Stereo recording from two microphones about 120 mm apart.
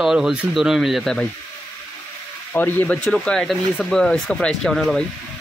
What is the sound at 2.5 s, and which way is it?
Speech, 15° left (ahead or behind).